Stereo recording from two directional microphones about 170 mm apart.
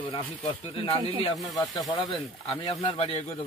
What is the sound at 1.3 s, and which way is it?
Speech, centre (ahead or behind).